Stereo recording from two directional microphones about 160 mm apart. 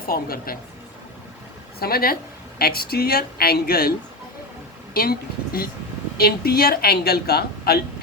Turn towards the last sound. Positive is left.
turn(degrees=75)  # may be behind; listen again after turning